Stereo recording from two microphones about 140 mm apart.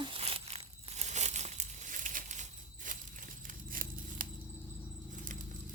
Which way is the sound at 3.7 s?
80° right.